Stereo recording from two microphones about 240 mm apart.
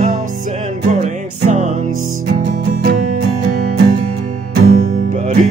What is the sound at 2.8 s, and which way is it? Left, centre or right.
Music, right.